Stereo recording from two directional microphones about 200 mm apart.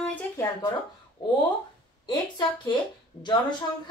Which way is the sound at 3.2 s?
20° left (ahead or behind).